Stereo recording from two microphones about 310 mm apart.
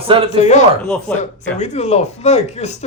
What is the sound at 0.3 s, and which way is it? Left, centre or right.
Speech, left.